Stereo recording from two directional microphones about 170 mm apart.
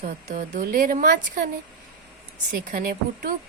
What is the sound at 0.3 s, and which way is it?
Speech, 45° right (ahead or behind).